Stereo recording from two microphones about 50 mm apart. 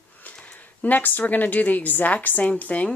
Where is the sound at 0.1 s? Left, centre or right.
Left.